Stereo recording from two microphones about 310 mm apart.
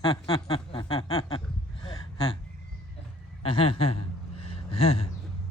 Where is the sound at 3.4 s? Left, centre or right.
Centre.